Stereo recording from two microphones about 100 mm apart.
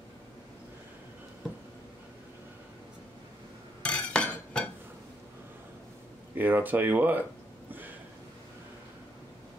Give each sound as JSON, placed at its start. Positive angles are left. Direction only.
{"t": 3.8, "sound": "cutlery", "side_deg": 10}
{"t": 6.3, "sound": "speech", "side_deg": -20}